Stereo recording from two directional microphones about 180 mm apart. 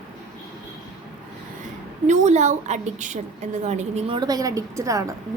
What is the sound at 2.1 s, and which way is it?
A woman's voice, 40° right (ahead or behind).